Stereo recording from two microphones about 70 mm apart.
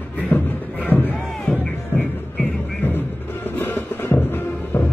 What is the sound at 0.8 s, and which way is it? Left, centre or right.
Music, left.